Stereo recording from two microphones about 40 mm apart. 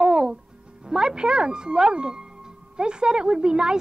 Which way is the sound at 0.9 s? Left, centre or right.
Centre.